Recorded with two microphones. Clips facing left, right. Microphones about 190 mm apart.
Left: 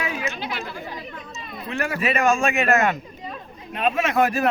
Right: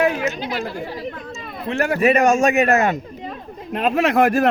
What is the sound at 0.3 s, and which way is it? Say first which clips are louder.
Chatter: right 5 dB; 40° right (ahead or behind).